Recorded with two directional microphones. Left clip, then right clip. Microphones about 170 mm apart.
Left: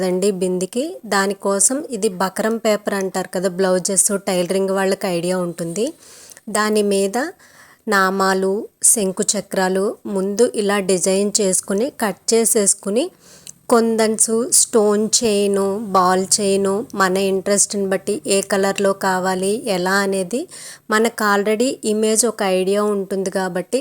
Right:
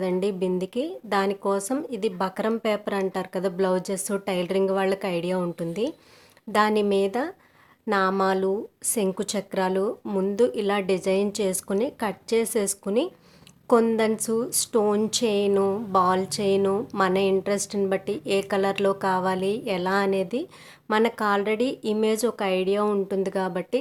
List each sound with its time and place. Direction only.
0.0 s a woman's voice: 35° left (ahead or behind)